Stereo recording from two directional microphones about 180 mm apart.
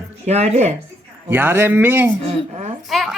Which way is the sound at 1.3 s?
10° right (ahead or behind).